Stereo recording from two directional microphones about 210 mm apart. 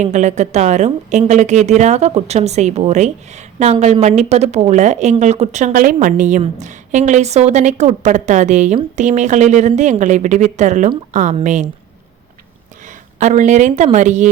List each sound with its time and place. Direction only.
0.0 s a woman's voice: 35° right (ahead or behind)
12.8 s speech: 35° right (ahead or behind)